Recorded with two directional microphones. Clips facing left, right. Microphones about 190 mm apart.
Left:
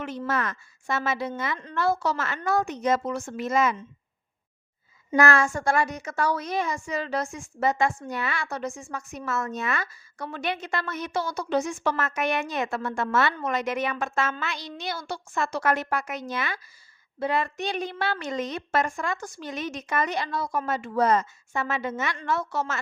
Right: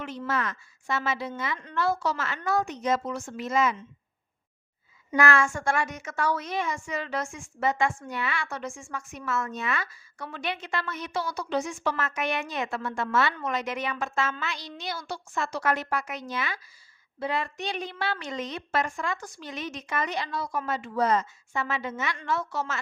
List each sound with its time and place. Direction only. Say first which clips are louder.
0.3 s a woman's voice: even; 50° left (ahead or behind)
5.1 s a woman's voice: left 2 dB; 40° left (ahead or behind)